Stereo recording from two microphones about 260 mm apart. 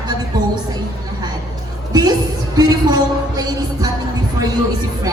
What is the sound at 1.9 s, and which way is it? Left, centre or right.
Music, centre.